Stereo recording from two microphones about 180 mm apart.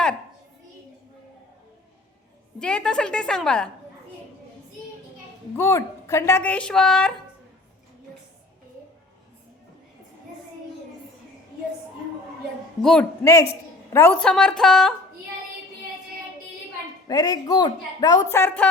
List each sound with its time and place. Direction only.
2.6 s a woman's voice: 5° left (ahead or behind)
5.5 s speech: 15° left (ahead or behind)
12.8 s a woman's voice: 5° left (ahead or behind)
13.2 s a woman's voice: 15° left (ahead or behind)
17.1 s speech: 20° left (ahead or behind)